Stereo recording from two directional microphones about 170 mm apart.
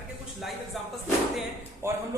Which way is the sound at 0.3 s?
Centre (ahead or behind).